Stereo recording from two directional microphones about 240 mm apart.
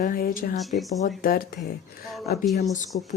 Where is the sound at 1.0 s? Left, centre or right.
Left.